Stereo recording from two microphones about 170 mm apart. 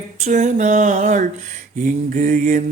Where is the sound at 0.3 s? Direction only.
50° right (ahead or behind).